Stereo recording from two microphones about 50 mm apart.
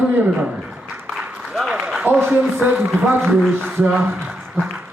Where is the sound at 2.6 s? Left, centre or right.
Right.